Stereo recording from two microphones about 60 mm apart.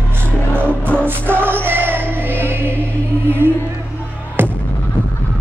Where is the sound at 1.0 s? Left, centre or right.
Right.